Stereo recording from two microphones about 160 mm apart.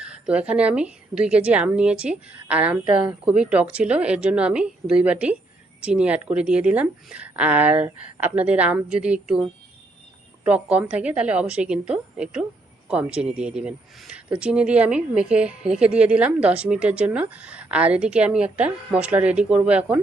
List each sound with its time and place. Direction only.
0.0 s speech: 5° right (ahead or behind)